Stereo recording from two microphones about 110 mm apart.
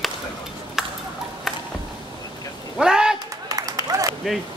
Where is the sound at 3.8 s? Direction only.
30° right (ahead or behind).